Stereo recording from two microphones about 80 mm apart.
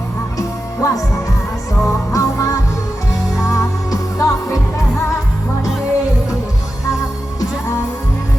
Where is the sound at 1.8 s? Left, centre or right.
Left.